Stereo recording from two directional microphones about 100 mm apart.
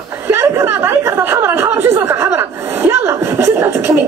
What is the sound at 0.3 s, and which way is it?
Chuckle, 25° right (ahead or behind).